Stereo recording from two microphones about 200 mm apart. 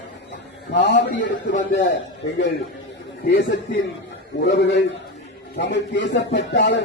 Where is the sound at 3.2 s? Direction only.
60° left (ahead or behind).